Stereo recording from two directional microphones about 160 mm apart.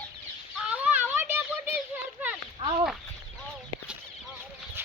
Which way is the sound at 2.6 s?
35° right (ahead or behind).